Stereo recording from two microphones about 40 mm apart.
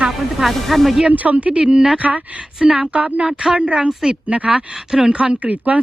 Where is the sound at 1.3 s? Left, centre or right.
Right.